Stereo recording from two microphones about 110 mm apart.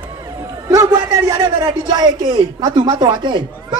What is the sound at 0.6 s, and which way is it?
A man's voice, 35° right (ahead or behind).